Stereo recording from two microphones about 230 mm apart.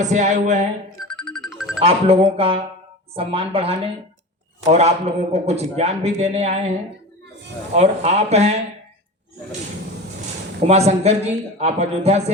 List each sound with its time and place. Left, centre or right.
0.0 s a sound: right
1.0 s music: centre
1.8 s a man's voice: right
10.6 s a man's voice: right